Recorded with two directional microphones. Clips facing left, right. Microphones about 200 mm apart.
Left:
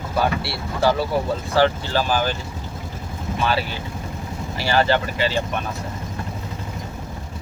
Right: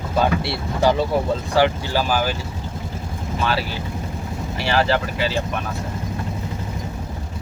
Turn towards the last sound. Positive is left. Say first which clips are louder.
# even
turn(degrees=0)  # may be behind; listen again after turning